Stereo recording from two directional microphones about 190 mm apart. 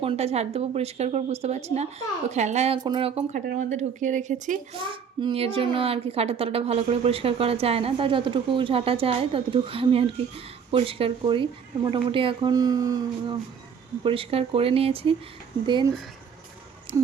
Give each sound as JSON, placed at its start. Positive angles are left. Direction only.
{"t": 0.0, "sound": "a woman's voice", "side_deg": -30}
{"t": 3.4, "sound": "a woman's voice", "side_deg": -40}
{"t": 4.9, "sound": "speech", "side_deg": -30}